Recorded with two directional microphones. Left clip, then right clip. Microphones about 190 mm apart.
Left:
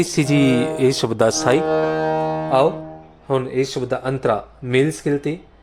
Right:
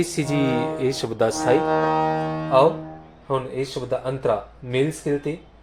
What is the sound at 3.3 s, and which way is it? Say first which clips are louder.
Speech: left 5 dB; 55° left (ahead or behind).